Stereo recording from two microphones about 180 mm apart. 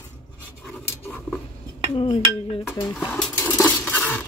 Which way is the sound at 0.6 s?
5° left (ahead or behind).